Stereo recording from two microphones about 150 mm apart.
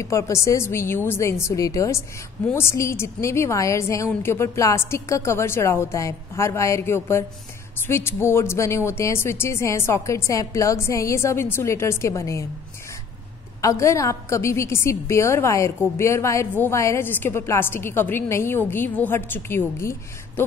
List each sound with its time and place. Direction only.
0.0 s a woman's voice: 20° left (ahead or behind)
13.6 s a woman's voice: 20° left (ahead or behind)